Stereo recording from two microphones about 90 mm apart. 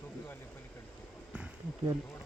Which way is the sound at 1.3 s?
10° right (ahead or behind).